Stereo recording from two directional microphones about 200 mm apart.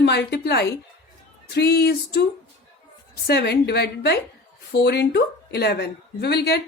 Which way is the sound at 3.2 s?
55° left (ahead or behind).